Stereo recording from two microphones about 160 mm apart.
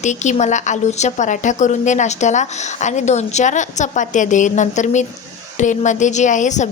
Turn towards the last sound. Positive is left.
turn(degrees=50)  # may be behind; listen again after turning